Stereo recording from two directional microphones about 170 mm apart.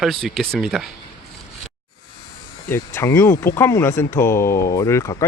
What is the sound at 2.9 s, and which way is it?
Speech, 15° left (ahead or behind).